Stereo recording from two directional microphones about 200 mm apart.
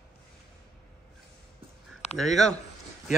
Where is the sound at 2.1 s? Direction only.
Centre (ahead or behind).